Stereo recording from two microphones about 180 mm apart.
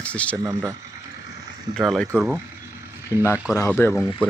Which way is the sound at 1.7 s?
Centre (ahead or behind).